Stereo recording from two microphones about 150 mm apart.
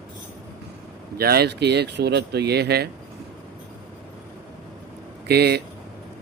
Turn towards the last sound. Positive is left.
turn(degrees=-90)